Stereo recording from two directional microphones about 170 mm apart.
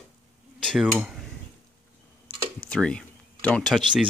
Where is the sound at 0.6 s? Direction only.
Centre (ahead or behind).